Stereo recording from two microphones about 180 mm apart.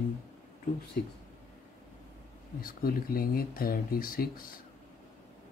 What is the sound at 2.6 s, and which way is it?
Speech, 55° left (ahead or behind).